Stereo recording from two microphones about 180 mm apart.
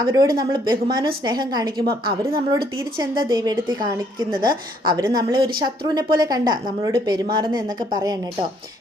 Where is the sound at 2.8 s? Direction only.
20° right (ahead or behind).